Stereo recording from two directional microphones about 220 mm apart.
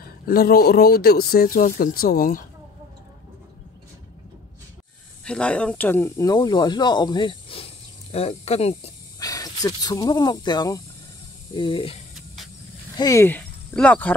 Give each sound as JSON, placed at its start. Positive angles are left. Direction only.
{"t": 0.3, "sound": "speech", "side_deg": 45}
{"t": 5.2, "sound": "speech", "side_deg": 5}
{"t": 9.2, "sound": "speech", "side_deg": 15}